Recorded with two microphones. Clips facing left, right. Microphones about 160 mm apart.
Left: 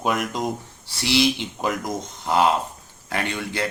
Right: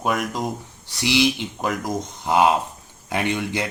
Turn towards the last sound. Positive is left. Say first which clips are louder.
# right 3 dB
turn(degrees=-20)  # may be behind; listen again after turning